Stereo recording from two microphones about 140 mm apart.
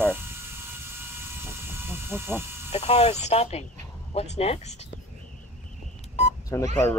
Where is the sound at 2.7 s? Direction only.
50° left (ahead or behind).